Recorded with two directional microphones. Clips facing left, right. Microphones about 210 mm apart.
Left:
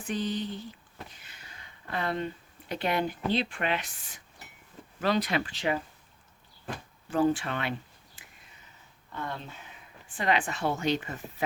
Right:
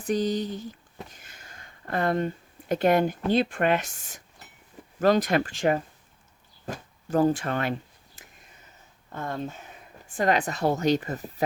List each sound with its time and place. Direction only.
0.0 s speech: 40° right (ahead or behind)
8.2 s a sound: 45° right (ahead or behind)
9.1 s speech: 45° right (ahead or behind)